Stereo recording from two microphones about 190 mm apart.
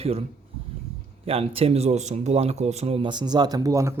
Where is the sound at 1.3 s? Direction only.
30° right (ahead or behind).